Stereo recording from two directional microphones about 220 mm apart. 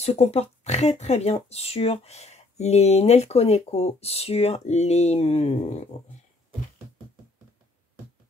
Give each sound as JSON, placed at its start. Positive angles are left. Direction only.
{"t": 0.0, "sound": "speech", "side_deg": 30}